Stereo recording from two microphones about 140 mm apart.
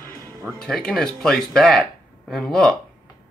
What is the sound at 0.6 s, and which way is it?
Speech, 5° left (ahead or behind).